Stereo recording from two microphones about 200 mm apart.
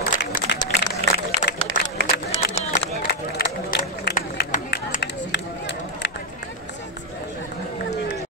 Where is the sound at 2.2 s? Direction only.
50° left (ahead or behind).